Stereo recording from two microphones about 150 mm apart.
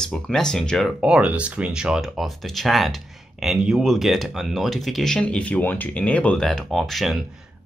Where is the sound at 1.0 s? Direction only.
5° right (ahead or behind).